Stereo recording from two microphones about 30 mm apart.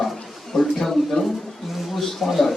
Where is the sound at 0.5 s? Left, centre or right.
Centre.